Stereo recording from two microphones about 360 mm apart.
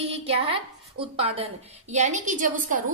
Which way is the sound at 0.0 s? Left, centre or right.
Centre.